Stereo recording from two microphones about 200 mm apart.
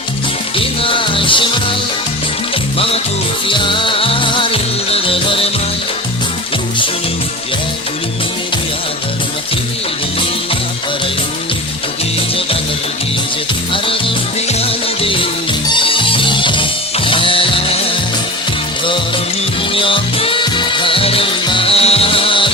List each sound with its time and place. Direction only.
0.5 s music: 25° left (ahead or behind)
2.7 s music: 30° left (ahead or behind)
13.8 s music: 25° left (ahead or behind)
19.7 s music: 25° left (ahead or behind)